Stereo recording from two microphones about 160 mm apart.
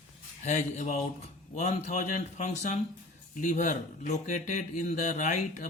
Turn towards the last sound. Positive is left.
turn(degrees=50)  # may be behind; listen again after turning